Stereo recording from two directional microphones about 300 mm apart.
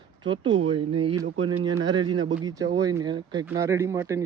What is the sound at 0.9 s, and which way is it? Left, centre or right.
A man's voice, centre.